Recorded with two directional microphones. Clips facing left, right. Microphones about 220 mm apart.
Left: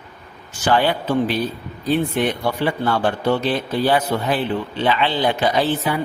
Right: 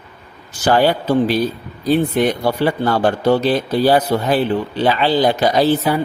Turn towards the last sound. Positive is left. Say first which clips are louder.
# right 5 dB
turn(degrees=-40)  # may be behind; listen again after turning